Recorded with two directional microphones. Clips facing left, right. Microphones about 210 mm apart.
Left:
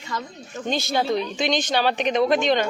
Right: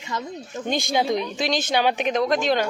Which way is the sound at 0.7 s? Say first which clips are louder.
Even; 15° right (ahead or behind).